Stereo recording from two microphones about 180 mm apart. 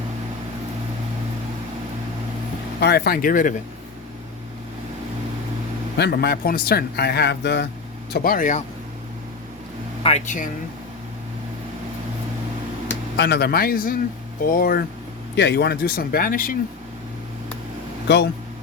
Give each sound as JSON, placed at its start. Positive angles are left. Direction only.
{"t": 2.8, "sound": "speech", "side_deg": 60}
{"t": 6.0, "sound": "speech", "side_deg": 60}
{"t": 8.1, "sound": "speech", "side_deg": 50}
{"t": 10.0, "sound": "speech", "side_deg": 35}
{"t": 13.1, "sound": "speech", "side_deg": 65}
{"t": 15.4, "sound": "speech", "side_deg": 65}
{"t": 18.1, "sound": "speech", "side_deg": 70}